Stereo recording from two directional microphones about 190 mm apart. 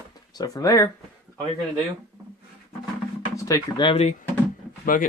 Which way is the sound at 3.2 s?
20° left (ahead or behind).